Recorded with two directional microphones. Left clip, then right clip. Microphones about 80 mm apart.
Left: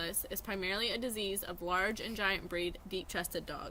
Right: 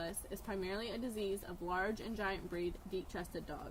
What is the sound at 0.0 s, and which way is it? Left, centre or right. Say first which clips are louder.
Speech: left 4 dB; left.